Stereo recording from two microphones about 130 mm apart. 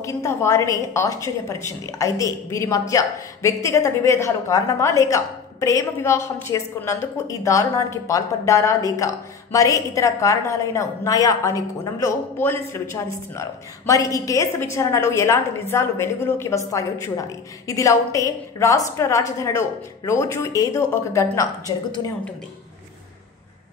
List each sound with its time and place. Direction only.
0.0 s a woman's voice: 20° left (ahead or behind)